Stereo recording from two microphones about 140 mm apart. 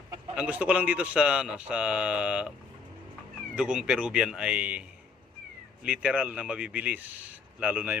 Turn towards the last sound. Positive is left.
turn(degrees=-10)  # may be behind; listen again after turning